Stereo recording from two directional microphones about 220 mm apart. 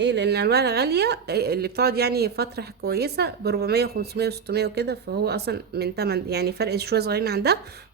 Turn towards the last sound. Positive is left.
turn(degrees=-45)  # may be behind; listen again after turning